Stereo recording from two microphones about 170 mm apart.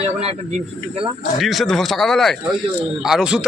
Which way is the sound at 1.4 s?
Centre (ahead or behind).